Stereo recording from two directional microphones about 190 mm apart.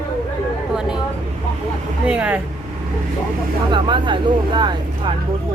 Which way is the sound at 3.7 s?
25° right (ahead or behind).